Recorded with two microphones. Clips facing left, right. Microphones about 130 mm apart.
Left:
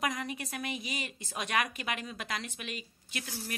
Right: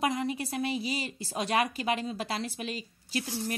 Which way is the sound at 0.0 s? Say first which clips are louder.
Right 5 dB; 30° right (ahead or behind).